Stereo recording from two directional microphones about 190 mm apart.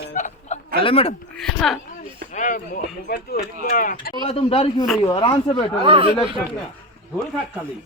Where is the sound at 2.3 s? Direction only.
45° left (ahead or behind).